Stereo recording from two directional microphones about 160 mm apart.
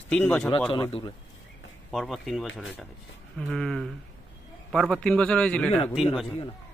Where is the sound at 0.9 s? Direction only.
35° left (ahead or behind).